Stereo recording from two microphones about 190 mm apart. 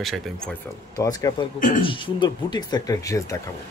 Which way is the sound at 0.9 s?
20° left (ahead or behind).